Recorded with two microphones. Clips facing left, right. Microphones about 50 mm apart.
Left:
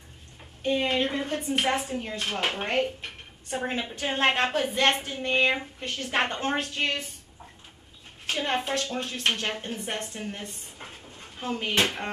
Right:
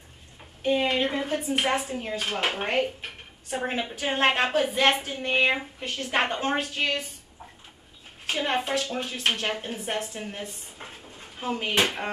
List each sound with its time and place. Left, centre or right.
0.6 s speech: centre
8.3 s speech: centre